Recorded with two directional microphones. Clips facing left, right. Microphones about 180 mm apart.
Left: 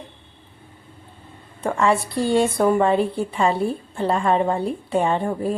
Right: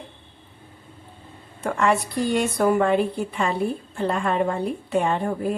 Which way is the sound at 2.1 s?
30° left (ahead or behind).